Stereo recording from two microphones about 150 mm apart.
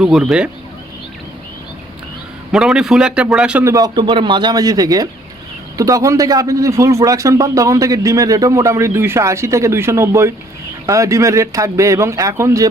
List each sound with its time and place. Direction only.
0.0 s a man's voice: 5° right (ahead or behind)
2.5 s a man's voice: 5° right (ahead or behind)
3.6 s a man's voice: 20° right (ahead or behind)